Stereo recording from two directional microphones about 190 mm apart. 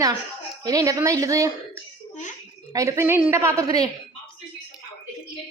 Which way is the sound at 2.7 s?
15° right (ahead or behind).